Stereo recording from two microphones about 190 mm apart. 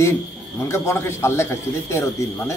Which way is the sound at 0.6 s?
15° left (ahead or behind).